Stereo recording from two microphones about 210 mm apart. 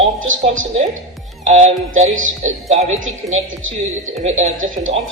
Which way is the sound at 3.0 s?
65° right (ahead or behind).